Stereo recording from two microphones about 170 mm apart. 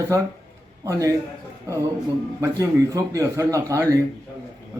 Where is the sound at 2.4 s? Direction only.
20° right (ahead or behind).